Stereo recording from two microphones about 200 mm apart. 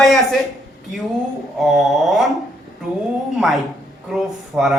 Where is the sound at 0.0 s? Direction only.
Centre (ahead or behind).